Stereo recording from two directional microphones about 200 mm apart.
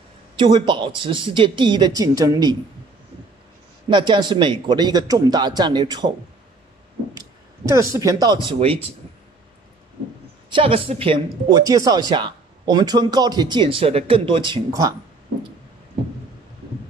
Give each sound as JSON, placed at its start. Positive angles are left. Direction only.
{"t": 0.4, "sound": "speech", "side_deg": -25}
{"t": 3.9, "sound": "speech", "side_deg": -20}
{"t": 7.2, "sound": "speech", "side_deg": -15}
{"t": 10.5, "sound": "speech", "side_deg": -25}